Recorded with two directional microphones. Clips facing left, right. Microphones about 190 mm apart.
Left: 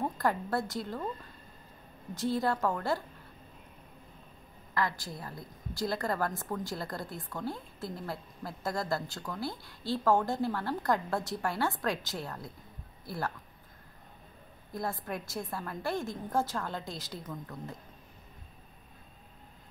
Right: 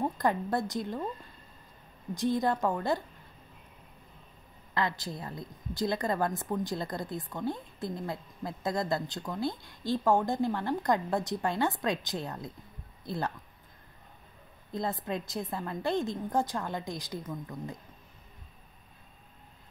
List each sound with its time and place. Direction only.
0.0 s a woman's voice: 15° right (ahead or behind)
2.1 s a woman's voice: 15° right (ahead or behind)
4.7 s a woman's voice: 20° right (ahead or behind)
14.7 s a woman's voice: 20° right (ahead or behind)